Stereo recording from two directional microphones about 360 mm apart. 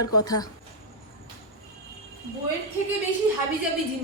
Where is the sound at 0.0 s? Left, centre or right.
Centre.